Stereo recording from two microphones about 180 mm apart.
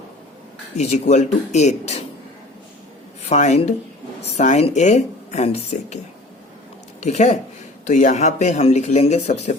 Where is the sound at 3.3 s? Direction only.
40° left (ahead or behind).